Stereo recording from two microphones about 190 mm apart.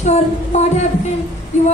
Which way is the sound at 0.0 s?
35° left (ahead or behind).